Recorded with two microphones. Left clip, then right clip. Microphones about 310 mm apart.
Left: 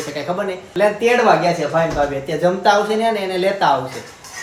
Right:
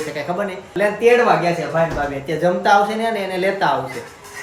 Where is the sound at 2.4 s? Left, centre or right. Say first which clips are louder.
Even; centre.